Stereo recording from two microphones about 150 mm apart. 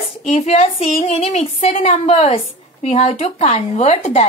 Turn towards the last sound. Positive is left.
turn(degrees=45)  # may be behind; listen again after turning